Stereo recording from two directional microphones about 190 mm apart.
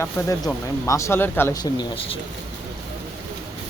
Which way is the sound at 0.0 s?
15° left (ahead or behind).